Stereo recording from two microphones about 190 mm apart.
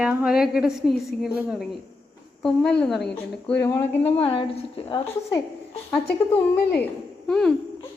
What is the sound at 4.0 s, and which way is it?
A woman's voice, 30° left (ahead or behind).